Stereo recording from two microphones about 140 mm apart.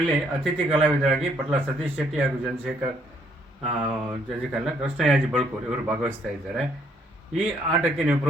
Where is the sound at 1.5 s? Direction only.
15° right (ahead or behind).